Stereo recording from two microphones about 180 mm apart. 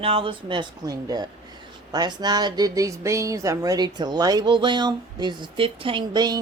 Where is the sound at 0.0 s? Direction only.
30° right (ahead or behind).